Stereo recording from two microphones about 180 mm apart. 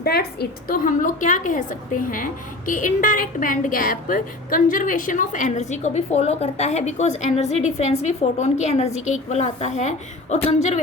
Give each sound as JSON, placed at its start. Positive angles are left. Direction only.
{"t": 0.0, "sound": "a woman's voice", "side_deg": 60}